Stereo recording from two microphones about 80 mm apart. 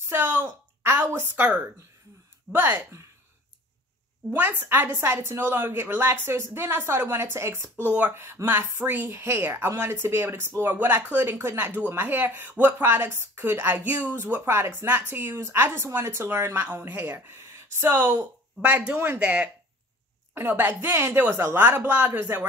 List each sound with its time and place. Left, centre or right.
0.0 s a sound: right
2.5 s speech: right
4.3 s speech: right